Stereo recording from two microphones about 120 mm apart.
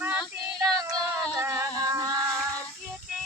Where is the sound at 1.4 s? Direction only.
25° right (ahead or behind).